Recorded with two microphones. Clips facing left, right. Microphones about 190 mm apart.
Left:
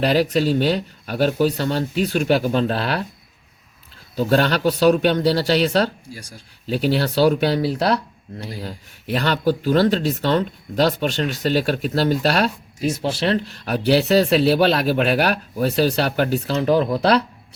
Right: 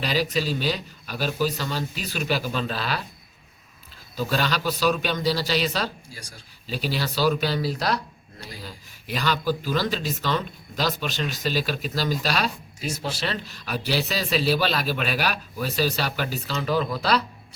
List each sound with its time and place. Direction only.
0.0 s speech: 60° left (ahead or behind)
4.3 s speech: 65° left (ahead or behind)
9.1 s speech: 60° left (ahead or behind)